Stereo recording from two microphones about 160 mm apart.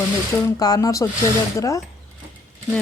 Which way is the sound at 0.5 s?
20° left (ahead or behind).